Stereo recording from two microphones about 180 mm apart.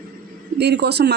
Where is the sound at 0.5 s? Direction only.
65° right (ahead or behind).